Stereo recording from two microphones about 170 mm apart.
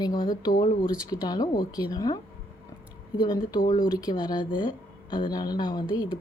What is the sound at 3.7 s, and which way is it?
Speech, 25° left (ahead or behind).